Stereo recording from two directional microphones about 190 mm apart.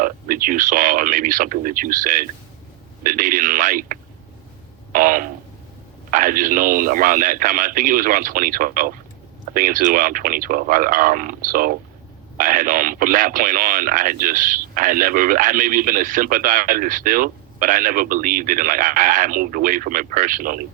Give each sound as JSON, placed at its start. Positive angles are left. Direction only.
{"t": 0.0, "sound": "speech", "side_deg": -45}
{"t": 4.9, "sound": "a sound", "side_deg": -45}
{"t": 6.1, "sound": "speech", "side_deg": -45}